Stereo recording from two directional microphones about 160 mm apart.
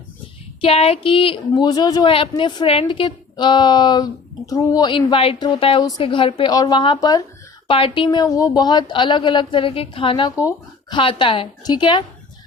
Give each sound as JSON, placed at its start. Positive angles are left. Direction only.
{"t": 0.6, "sound": "a woman's voice", "side_deg": 40}